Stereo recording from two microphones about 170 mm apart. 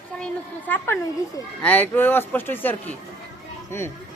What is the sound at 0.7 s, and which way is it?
A man's voice, 10° left (ahead or behind).